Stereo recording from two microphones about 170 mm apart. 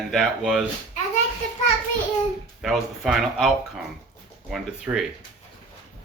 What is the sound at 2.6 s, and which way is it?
Speech, centre (ahead or behind).